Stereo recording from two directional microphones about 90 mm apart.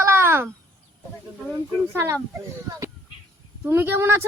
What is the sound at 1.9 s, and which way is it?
Speech, 25° right (ahead or behind).